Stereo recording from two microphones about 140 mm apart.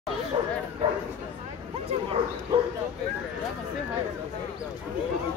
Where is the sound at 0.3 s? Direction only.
40° right (ahead or behind).